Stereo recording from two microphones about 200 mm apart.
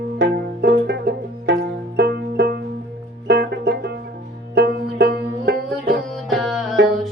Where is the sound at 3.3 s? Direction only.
55° right (ahead or behind).